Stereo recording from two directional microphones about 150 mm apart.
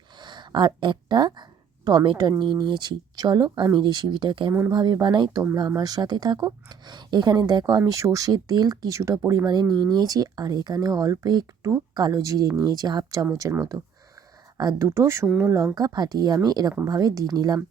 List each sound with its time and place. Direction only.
0.2 s a sound: 30° right (ahead or behind)
2.0 s speech: 30° right (ahead or behind)
14.6 s speech: 25° right (ahead or behind)
15.7 s speech: 30° right (ahead or behind)